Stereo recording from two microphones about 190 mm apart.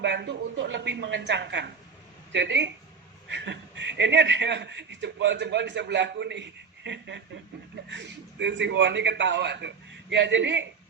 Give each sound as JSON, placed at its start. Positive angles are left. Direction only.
{"t": 0.0, "sound": "a woman's voice", "side_deg": -65}